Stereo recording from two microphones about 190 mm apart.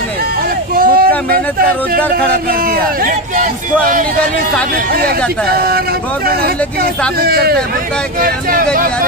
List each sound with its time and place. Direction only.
0.7 s a sound: 50° right (ahead or behind)
2.7 s speech: 45° right (ahead or behind)
4.9 s speech: 55° right (ahead or behind)